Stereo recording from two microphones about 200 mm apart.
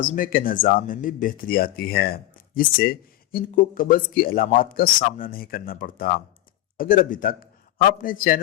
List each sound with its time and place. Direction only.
0.0 s a man's voice: 45° left (ahead or behind)